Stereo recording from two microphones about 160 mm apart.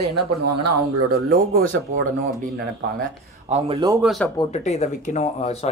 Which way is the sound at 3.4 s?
40° right (ahead or behind).